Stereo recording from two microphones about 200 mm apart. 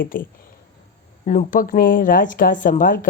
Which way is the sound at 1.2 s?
40° left (ahead or behind).